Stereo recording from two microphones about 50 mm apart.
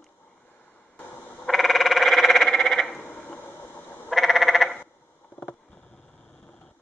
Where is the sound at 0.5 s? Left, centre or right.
Left.